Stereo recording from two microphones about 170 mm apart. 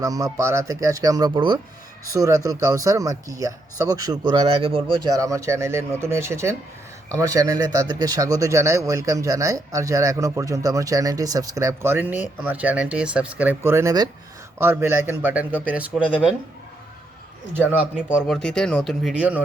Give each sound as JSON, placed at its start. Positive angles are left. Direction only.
{"t": 0.0, "sound": "speech", "side_deg": -20}
{"t": 5.1, "sound": "speech", "side_deg": -20}
{"t": 17.5, "sound": "speech", "side_deg": -10}